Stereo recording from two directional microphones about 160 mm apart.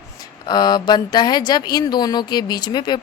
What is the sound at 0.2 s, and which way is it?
Speech, 25° left (ahead or behind).